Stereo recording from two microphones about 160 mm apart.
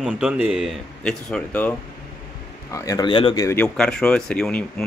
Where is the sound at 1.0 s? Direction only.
5° left (ahead or behind).